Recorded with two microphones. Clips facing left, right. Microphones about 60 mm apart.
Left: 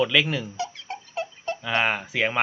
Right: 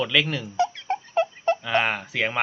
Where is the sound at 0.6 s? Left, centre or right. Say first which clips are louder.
Right 8 dB; right.